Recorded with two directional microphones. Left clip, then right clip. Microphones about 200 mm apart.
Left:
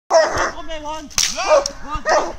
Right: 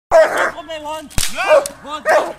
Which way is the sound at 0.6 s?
25° right (ahead or behind).